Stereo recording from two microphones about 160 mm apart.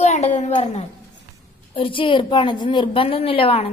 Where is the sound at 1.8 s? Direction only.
30° left (ahead or behind).